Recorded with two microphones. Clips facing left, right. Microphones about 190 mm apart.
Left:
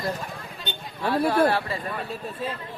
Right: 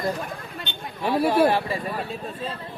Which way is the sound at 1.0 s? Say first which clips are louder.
Right 2 dB; 15° right (ahead or behind).